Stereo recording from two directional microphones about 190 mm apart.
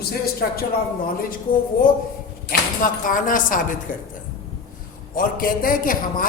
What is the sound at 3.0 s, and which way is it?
Speech, 45° left (ahead or behind).